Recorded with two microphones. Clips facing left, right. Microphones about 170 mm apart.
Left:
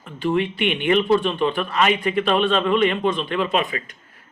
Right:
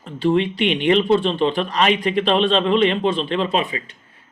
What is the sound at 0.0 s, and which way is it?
Speech, 30° right (ahead or behind).